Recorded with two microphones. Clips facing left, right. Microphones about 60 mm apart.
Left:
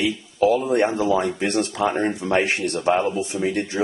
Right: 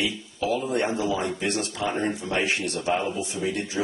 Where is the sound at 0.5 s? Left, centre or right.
Left.